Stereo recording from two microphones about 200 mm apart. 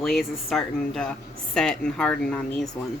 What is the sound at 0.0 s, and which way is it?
Speech, centre (ahead or behind).